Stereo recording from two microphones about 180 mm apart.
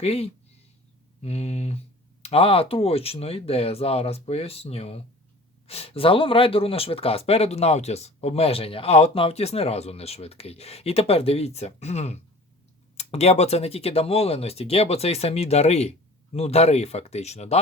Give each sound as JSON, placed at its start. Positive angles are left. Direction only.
{"t": 0.0, "sound": "speech", "side_deg": 35}